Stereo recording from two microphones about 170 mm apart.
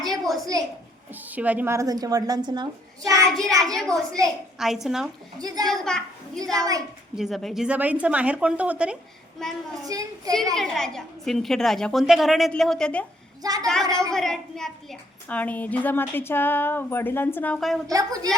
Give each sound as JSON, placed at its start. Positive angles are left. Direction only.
{"t": 0.0, "sound": "a sound", "side_deg": 0}
{"t": 1.1, "sound": "a woman's voice", "side_deg": -10}
{"t": 3.2, "sound": "a woman's voice", "side_deg": 5}
{"t": 5.4, "sound": "a woman's voice", "side_deg": -20}
{"t": 5.6, "sound": "a child's voice", "side_deg": 0}
{"t": 9.8, "sound": "a woman's voice", "side_deg": -20}
{"t": 10.5, "sound": "a woman's voice", "side_deg": 0}
{"t": 13.4, "sound": "a woman's voice", "side_deg": -20}
{"t": 14.1, "sound": "a woman's voice", "side_deg": 0}
{"t": 17.8, "sound": "a woman's voice", "side_deg": -20}